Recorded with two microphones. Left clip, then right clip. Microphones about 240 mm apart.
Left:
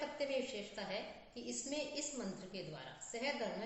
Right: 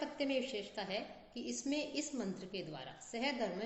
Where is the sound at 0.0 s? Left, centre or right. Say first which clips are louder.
Right 2 dB; right.